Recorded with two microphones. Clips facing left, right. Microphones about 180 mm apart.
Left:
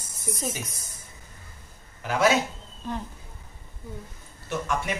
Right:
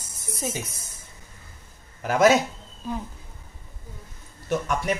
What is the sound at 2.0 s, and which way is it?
Speech, 45° right (ahead or behind).